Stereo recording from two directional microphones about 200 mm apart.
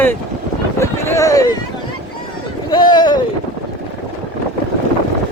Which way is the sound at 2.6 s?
20° left (ahead or behind).